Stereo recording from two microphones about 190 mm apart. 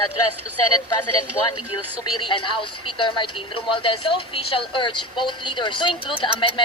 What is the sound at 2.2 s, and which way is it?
Speech, 25° left (ahead or behind).